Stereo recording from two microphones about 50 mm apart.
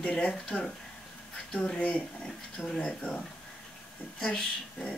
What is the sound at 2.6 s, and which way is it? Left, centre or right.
Speech, centre.